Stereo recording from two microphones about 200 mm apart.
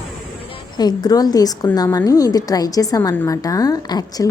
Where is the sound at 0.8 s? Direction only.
20° left (ahead or behind).